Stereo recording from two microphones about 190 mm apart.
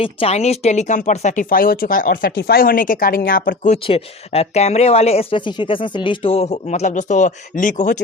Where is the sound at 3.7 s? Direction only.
30° left (ahead or behind).